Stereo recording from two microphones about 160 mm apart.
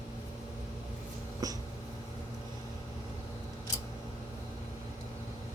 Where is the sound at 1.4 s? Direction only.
20° right (ahead or behind).